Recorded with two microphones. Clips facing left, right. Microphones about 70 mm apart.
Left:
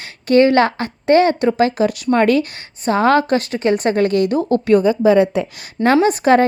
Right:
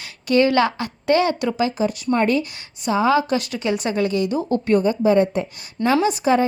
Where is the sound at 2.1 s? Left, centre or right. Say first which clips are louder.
Left 5 dB; left.